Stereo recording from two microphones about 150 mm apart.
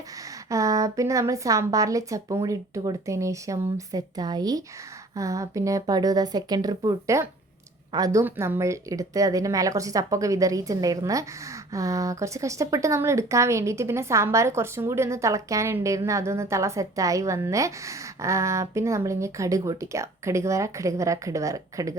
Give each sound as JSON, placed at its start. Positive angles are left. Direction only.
{"t": 0.5, "sound": "a woman's voice", "side_deg": -20}